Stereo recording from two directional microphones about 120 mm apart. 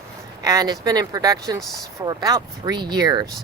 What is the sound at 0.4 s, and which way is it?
Speech, 35° right (ahead or behind).